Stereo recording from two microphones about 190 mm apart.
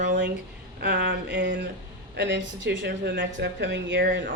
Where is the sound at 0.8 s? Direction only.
60° right (ahead or behind).